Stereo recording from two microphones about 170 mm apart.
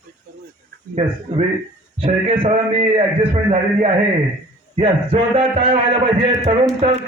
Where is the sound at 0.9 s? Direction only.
35° right (ahead or behind).